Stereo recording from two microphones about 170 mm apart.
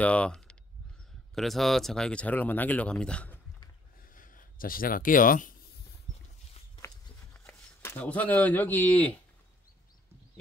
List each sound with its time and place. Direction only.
0.0 s speech: 10° left (ahead or behind)
4.1 s speech: 55° left (ahead or behind)
7.4 s speech: 10° left (ahead or behind)